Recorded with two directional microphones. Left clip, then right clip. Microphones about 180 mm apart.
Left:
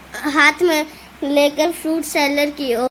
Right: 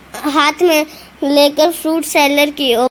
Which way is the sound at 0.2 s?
20° right (ahead or behind).